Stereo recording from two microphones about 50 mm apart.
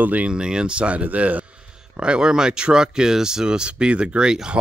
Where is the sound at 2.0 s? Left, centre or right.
Centre.